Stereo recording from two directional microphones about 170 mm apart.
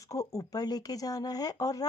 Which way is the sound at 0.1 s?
20° left (ahead or behind).